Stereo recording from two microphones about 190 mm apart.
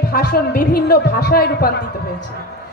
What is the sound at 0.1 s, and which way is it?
A woman's voice, 50° left (ahead or behind).